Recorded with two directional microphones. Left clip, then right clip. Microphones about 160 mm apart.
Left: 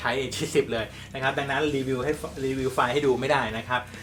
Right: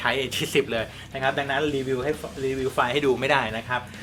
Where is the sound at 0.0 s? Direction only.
20° right (ahead or behind).